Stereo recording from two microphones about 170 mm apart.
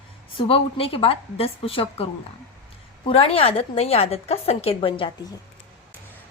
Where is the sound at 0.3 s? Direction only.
35° left (ahead or behind).